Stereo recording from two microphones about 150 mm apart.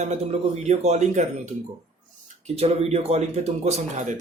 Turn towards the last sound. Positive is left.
turn(degrees=-50)  # may be behind; listen again after turning